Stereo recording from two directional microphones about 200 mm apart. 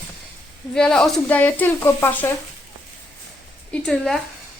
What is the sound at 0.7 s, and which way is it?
Speech, 5° left (ahead or behind).